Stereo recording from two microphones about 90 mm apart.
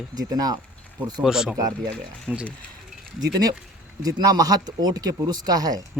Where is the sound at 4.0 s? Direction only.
45° right (ahead or behind).